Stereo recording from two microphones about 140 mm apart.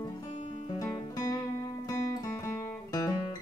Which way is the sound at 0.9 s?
25° left (ahead or behind).